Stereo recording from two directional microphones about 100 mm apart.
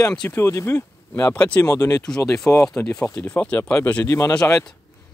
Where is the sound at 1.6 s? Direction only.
35° left (ahead or behind).